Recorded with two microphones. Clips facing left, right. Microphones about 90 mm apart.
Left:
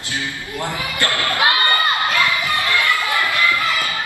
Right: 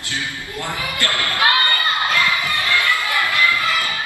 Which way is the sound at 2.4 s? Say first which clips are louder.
Left 1 dB; 20° left (ahead or behind).